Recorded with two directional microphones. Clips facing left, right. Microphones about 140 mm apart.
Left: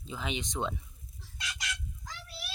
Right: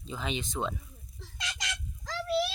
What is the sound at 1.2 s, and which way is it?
Fowl, 90° right.